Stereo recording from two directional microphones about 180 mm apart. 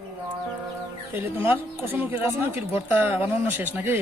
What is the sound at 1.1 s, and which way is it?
Speech, 10° right (ahead or behind).